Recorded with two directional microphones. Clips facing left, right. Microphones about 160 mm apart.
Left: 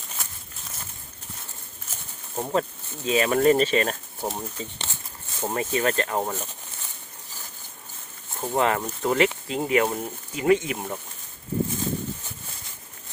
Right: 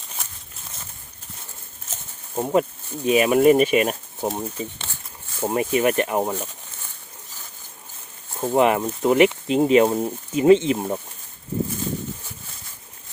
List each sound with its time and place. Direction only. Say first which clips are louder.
2.3 s speech: right 5 dB; 15° right (ahead or behind)
8.4 s speech: right 5 dB; 15° right (ahead or behind)